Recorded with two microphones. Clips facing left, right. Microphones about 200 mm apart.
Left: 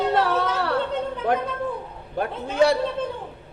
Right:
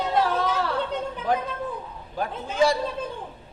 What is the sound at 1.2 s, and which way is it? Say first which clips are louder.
Speech: left 2 dB; 60° left (ahead or behind).